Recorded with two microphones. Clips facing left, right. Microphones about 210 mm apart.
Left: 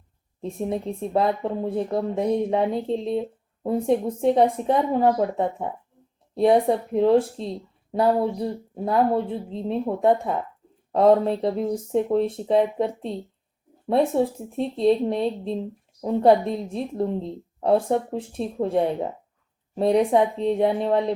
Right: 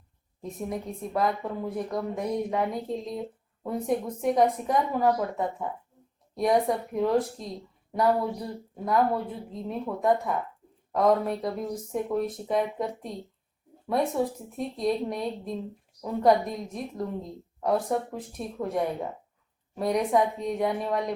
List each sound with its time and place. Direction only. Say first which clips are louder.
0.4 s speech: left 6 dB; 30° left (ahead or behind)